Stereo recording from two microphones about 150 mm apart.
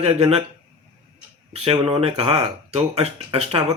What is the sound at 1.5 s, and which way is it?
Speech, 40° right (ahead or behind).